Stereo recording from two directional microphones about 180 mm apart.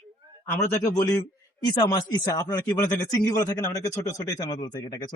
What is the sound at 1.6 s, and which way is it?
Speech, 25° left (ahead or behind).